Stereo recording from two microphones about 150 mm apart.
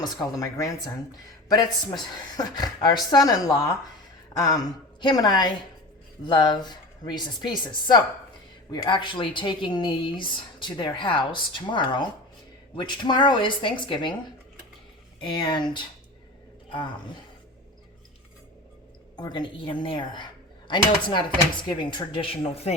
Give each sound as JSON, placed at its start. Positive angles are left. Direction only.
{"t": 0.0, "sound": "a woman's voice", "side_deg": 25}
{"t": 15.2, "sound": "speech", "side_deg": 30}
{"t": 19.1, "sound": "speech", "side_deg": 30}